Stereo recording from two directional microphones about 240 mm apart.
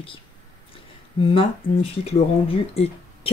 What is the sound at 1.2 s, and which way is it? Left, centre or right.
Speech, left.